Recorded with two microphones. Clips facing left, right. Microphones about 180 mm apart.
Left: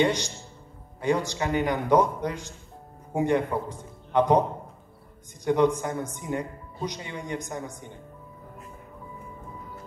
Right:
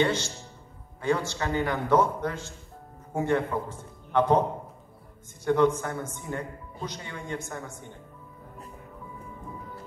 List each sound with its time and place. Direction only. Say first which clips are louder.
0.0 s a man's voice: left 2 dB; 15° left (ahead or behind)
5.4 s a man's voice: left 1 dB; 15° left (ahead or behind)